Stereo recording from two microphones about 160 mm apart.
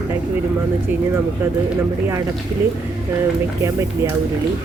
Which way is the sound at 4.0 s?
15° right (ahead or behind).